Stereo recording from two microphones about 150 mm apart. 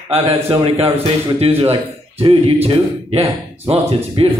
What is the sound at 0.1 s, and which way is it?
A man's voice, 40° right (ahead or behind).